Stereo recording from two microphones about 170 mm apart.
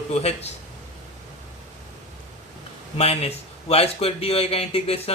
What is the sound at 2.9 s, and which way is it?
Speech, 40° left (ahead or behind).